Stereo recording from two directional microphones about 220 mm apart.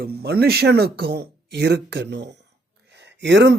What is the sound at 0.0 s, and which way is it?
Speech, 45° right (ahead or behind).